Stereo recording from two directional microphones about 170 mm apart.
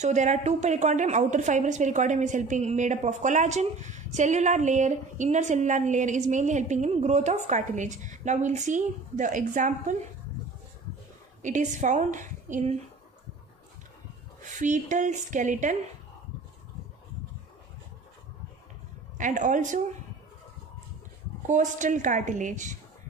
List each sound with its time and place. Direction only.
0.0 s a woman's voice: 45° right (ahead or behind)
11.4 s a woman's voice: 45° right (ahead or behind)
14.4 s a woman's voice: 45° right (ahead or behind)
19.1 s a woman's voice: 50° right (ahead or behind)
21.5 s a woman's voice: 45° right (ahead or behind)